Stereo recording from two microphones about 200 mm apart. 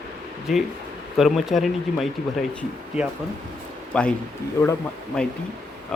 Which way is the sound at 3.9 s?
5° left (ahead or behind).